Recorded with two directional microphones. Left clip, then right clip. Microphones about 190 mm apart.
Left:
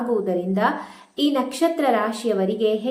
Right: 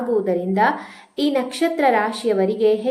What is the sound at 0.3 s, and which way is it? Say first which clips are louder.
A woman's voice: right 3 dB; 15° right (ahead or behind).